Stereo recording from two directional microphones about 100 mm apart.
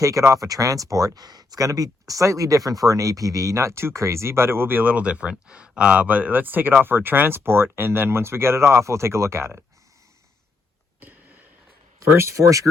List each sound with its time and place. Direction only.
0.0 s speech: 35° right (ahead or behind)
12.1 s speech: 30° right (ahead or behind)